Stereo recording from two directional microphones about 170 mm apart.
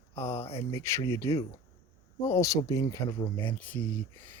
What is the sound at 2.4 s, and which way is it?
Speech, 20° left (ahead or behind).